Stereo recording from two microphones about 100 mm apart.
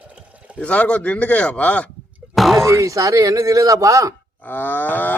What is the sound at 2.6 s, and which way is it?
Speech, 30° right (ahead or behind).